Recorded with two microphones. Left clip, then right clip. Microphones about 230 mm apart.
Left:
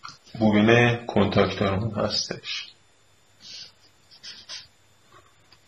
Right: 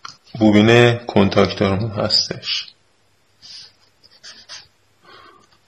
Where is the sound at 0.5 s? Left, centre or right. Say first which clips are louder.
Right 7 dB; right.